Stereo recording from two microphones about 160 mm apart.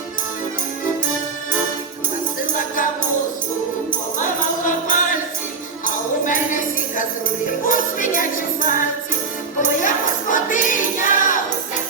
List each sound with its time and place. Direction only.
2.6 s music: 55° left (ahead or behind)
4.2 s tambourine: 55° left (ahead or behind)
7.6 s music: 55° left (ahead or behind)